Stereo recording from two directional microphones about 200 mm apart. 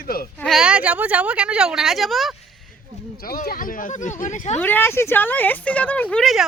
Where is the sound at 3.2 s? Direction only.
45° left (ahead or behind).